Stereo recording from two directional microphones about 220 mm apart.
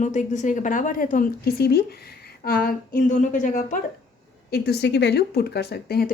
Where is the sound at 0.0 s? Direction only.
35° left (ahead or behind).